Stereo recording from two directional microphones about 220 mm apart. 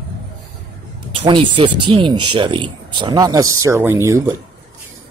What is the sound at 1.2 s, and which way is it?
Speech, 25° right (ahead or behind).